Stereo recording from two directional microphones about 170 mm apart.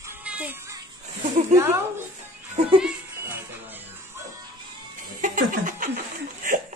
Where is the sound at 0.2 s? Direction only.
10° right (ahead or behind).